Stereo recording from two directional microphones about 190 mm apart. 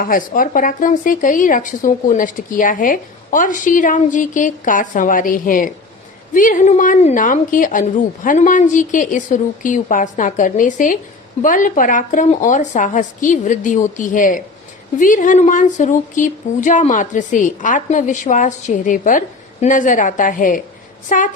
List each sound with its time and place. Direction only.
0.0 s speech: 45° left (ahead or behind)